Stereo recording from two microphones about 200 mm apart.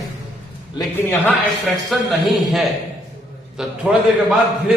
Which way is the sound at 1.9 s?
Centre (ahead or behind).